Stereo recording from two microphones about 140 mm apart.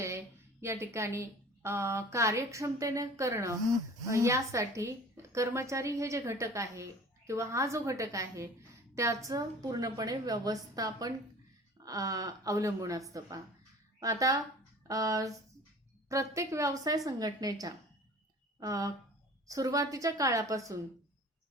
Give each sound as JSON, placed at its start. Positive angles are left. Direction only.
{"t": 0.0, "sound": "a woman's voice", "side_deg": -20}